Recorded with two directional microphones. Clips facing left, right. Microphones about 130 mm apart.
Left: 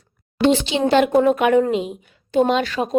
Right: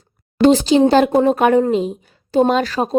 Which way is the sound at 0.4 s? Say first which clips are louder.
Right 6 dB; 40° right (ahead or behind).